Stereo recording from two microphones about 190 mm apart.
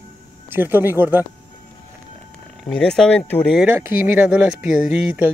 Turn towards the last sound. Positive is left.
turn(degrees=-5)  # may be behind; listen again after turning